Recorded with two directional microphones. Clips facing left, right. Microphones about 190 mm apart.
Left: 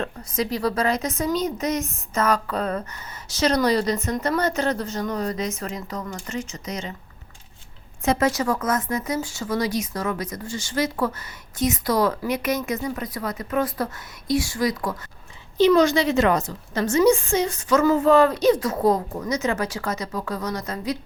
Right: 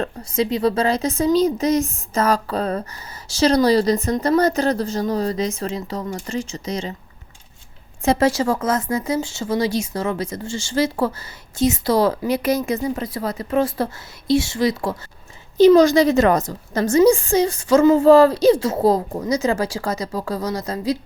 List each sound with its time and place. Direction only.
0.0 s speech: 30° right (ahead or behind)
8.0 s speech: 30° right (ahead or behind)
15.5 s speech: 40° right (ahead or behind)